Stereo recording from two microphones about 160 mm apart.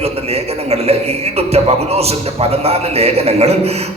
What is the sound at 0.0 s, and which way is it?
A man's voice, 40° right (ahead or behind).